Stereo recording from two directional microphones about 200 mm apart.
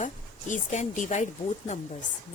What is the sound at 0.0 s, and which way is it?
Speech, 40° left (ahead or behind).